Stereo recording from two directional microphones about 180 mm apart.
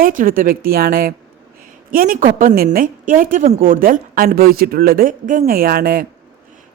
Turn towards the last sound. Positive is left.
turn(degrees=-55)  # may be behind; listen again after turning